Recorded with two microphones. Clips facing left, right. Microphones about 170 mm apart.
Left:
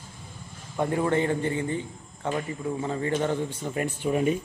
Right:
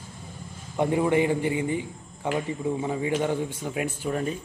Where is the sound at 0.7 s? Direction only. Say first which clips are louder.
Right 2 dB; 15° right (ahead or behind).